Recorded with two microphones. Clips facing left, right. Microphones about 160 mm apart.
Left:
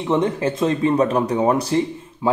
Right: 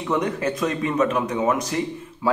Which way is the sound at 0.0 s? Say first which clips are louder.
Left 4 dB; 25° left (ahead or behind).